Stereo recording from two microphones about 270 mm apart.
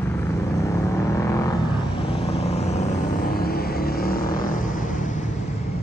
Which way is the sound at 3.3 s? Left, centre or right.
Left.